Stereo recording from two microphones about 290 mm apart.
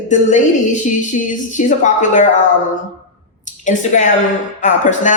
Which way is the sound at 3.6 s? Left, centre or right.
Left.